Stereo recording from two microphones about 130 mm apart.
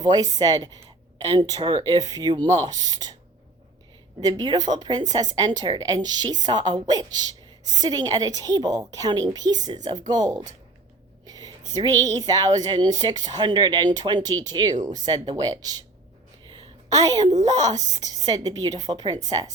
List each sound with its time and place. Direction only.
0.0 s a woman's voice: 30° right (ahead or behind)
4.2 s a woman's voice: 30° right (ahead or behind)
16.4 s a sound: 35° right (ahead or behind)
17.4 s a woman's voice: 30° right (ahead or behind)